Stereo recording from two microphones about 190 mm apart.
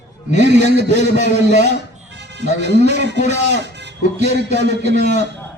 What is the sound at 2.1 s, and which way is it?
A man's voice, 65° right (ahead or behind).